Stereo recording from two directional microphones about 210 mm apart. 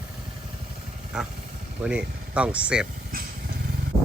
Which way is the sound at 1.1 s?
5° right (ahead or behind).